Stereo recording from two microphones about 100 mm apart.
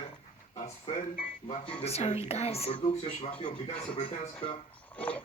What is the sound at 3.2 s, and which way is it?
Speech, 70° left (ahead or behind).